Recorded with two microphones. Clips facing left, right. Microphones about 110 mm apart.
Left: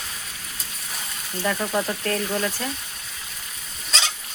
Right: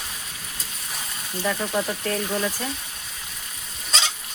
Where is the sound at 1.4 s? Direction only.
Centre (ahead or behind).